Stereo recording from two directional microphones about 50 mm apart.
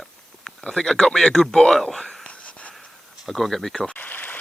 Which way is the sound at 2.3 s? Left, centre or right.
Left.